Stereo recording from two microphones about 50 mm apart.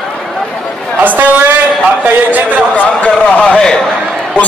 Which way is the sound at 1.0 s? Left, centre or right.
Right.